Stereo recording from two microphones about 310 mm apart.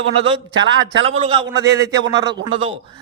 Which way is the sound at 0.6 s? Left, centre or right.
Right.